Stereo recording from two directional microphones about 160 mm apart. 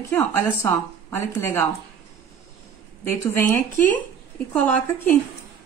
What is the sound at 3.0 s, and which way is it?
A woman's voice, 15° left (ahead or behind).